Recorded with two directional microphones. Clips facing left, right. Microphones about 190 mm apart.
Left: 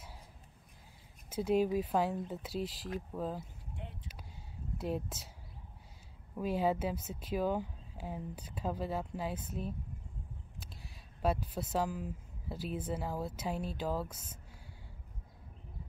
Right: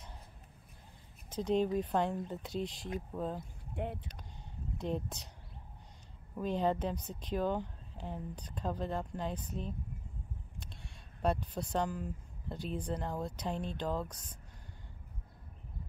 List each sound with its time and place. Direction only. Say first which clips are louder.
1.3 s speech: left 1 dB; 5° left (ahead or behind)
3.7 s speech: right 10 dB; 60° right (ahead or behind)
4.7 s speech: even; 5° left (ahead or behind)
6.3 s speech: even; 5° left (ahead or behind)